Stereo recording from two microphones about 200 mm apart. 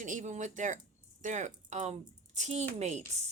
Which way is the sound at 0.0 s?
40° right (ahead or behind).